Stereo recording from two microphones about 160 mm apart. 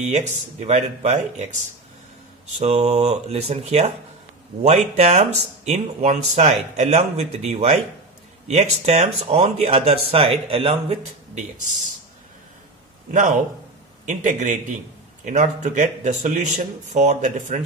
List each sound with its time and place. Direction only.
0.0 s speech: 45° right (ahead or behind)
2.6 s a man's voice: 45° right (ahead or behind)
13.1 s speech: 55° right (ahead or behind)